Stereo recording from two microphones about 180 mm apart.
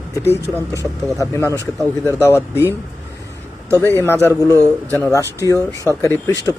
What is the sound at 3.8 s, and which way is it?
Speech, 15° left (ahead or behind).